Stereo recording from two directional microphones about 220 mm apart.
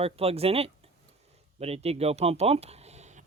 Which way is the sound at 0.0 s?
25° right (ahead or behind).